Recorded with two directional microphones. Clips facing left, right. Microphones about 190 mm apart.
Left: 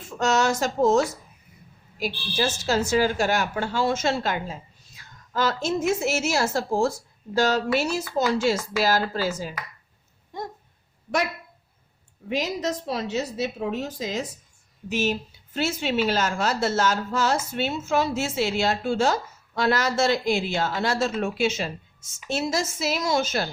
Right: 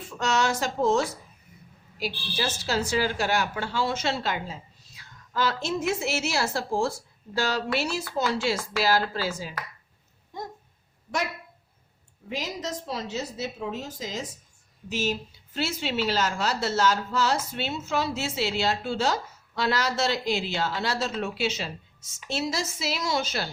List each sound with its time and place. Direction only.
0.2 s a woman's voice: 45° left (ahead or behind)
12.3 s a woman's voice: 65° left (ahead or behind)
15.5 s a woman's voice: 50° left (ahead or behind)